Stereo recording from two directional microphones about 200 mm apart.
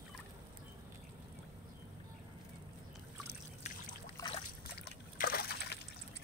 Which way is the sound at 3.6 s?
35° left (ahead or behind).